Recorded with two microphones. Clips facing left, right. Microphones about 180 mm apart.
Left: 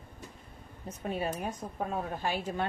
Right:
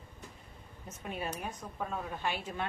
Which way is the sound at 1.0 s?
40° left (ahead or behind).